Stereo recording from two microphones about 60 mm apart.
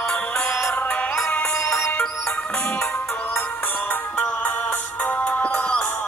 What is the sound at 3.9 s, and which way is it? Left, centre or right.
Music, left.